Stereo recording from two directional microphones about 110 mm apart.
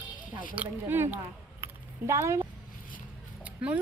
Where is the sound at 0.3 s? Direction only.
15° right (ahead or behind).